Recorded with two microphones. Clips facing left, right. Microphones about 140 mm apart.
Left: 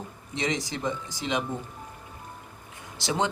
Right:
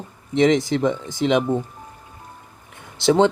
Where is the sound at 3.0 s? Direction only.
60° right (ahead or behind).